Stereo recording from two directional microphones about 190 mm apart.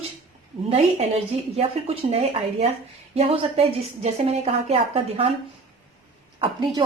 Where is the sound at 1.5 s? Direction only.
30° right (ahead or behind).